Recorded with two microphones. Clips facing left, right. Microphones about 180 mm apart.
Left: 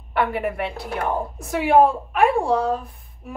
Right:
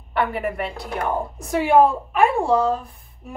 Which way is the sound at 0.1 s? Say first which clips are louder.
Left 1 dB; centre (ahead or behind).